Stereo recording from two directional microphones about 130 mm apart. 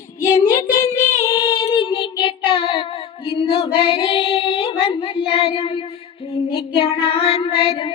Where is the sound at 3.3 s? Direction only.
45° left (ahead or behind).